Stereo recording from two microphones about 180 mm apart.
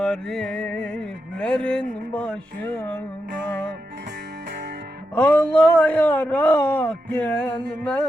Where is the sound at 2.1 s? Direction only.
5° left (ahead or behind).